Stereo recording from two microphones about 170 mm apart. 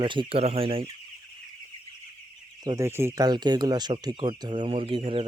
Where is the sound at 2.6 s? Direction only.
20° right (ahead or behind).